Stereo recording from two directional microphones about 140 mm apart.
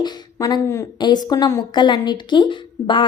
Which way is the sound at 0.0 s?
30° left (ahead or behind).